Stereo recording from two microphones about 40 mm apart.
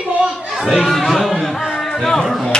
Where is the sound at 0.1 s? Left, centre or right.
Right.